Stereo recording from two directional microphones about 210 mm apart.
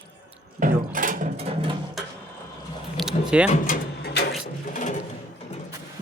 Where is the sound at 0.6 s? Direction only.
40° right (ahead or behind).